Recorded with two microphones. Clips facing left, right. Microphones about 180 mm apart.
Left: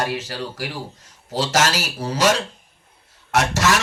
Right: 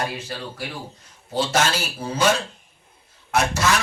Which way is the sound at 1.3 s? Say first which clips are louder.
Left 1 dB; 90° left.